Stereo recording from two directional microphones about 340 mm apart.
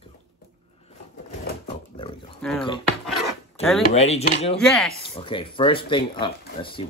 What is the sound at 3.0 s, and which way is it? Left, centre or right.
Zipper, centre.